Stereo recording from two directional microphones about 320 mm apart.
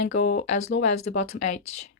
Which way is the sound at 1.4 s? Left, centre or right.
Left.